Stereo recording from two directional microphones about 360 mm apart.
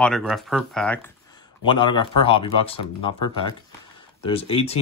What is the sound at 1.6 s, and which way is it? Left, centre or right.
Speech, centre.